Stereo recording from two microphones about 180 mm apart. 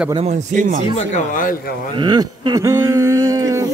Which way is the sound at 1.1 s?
50° left (ahead or behind).